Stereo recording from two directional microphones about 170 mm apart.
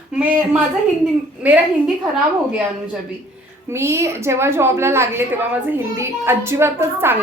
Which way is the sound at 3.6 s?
15° right (ahead or behind).